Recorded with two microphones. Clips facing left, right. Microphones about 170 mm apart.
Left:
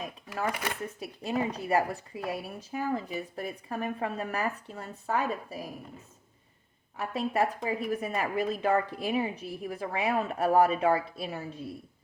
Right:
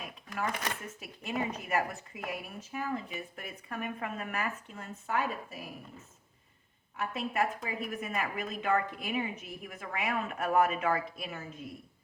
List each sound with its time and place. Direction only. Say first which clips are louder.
0.9 s a woman's voice: left 5 dB; 35° left (ahead or behind)
7.0 s a woman's voice: left 4 dB; 35° left (ahead or behind)